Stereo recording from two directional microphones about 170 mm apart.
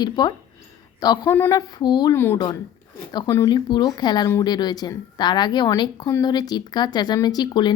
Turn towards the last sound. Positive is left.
turn(degrees=25)  # may be behind; listen again after turning